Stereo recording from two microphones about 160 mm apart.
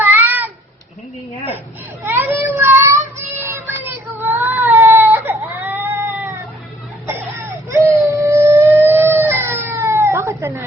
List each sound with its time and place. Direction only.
0.0 s a sound: 10° right (ahead or behind)
2.0 s child singing: 15° right (ahead or behind)
7.1 s vehicle: 15° right (ahead or behind)
7.9 s howl: 15° right (ahead or behind)